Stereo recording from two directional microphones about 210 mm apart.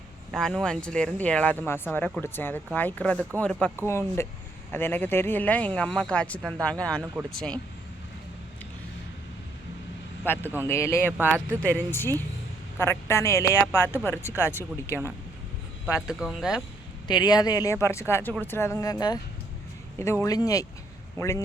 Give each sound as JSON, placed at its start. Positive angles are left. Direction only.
{"t": 0.3, "sound": "speech", "side_deg": 5}
{"t": 7.0, "sound": "speech", "side_deg": -10}
{"t": 7.3, "sound": "speech", "side_deg": 5}
{"t": 10.2, "sound": "speech", "side_deg": 10}
{"t": 11.2, "sound": "speech", "side_deg": -5}
{"t": 11.9, "sound": "speech", "side_deg": 10}
{"t": 16.0, "sound": "speech", "side_deg": -5}
{"t": 17.1, "sound": "speech", "side_deg": 20}